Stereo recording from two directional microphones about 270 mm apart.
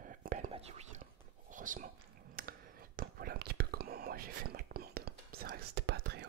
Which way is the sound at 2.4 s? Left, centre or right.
Right.